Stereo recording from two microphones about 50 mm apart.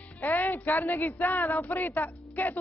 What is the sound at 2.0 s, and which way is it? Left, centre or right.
Speech, left.